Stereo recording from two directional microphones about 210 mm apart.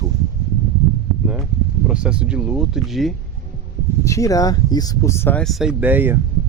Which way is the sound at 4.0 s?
15° left (ahead or behind).